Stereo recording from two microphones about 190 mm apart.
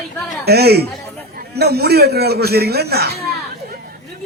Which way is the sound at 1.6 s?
55° right (ahead or behind).